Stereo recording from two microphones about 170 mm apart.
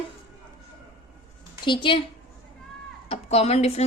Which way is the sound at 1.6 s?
30° left (ahead or behind).